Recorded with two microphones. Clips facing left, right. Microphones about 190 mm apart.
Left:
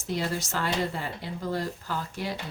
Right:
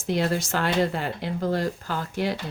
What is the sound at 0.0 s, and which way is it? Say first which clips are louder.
Speech: right 6 dB; 80° right.